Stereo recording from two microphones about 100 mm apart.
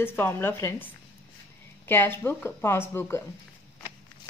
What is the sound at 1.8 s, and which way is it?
Speech, 20° left (ahead or behind).